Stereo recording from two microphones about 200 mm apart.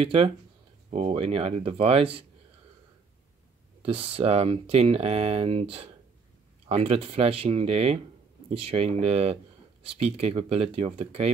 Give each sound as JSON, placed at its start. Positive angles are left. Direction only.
{"t": 0.0, "sound": "speech", "side_deg": -30}
{"t": 3.8, "sound": "speech", "side_deg": -30}